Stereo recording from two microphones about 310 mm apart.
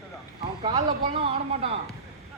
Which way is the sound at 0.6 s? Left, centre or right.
Centre.